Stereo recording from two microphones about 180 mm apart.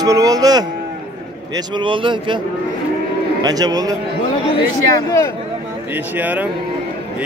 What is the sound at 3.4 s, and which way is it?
Speech, 20° right (ahead or behind).